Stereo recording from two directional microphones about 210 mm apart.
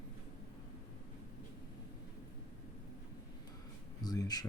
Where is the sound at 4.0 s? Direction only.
20° left (ahead or behind).